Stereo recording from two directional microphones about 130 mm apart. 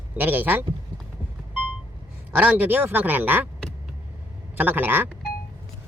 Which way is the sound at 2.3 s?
10° right (ahead or behind).